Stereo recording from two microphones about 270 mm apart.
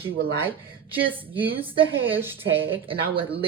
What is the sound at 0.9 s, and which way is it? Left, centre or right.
A woman's voice, centre.